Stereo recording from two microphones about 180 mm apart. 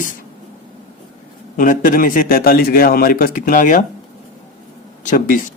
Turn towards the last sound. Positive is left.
turn(degrees=45)  # may be behind; listen again after turning